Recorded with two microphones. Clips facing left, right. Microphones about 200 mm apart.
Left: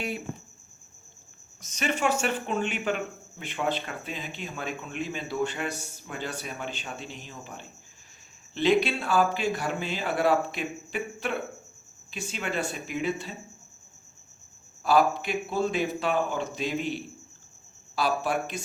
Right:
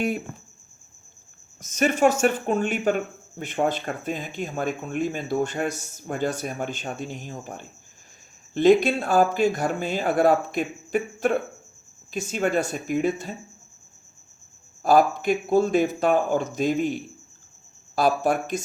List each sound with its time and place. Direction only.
1.6 s speech: 45° right (ahead or behind)
14.8 s speech: 45° right (ahead or behind)